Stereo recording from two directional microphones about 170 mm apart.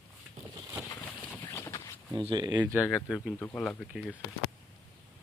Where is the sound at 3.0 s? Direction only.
Centre (ahead or behind).